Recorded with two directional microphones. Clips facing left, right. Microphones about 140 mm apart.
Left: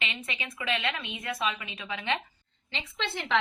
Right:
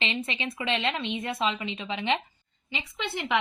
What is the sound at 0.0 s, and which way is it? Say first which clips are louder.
Speech: right 6 dB; 30° right (ahead or behind).